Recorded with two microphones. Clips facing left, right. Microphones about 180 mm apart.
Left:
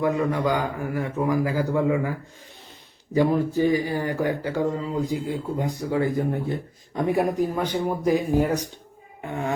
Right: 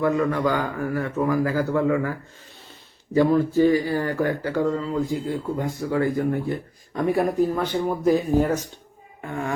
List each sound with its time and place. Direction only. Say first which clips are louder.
0.0 s a man's voice: right 1 dB; 15° left (ahead or behind)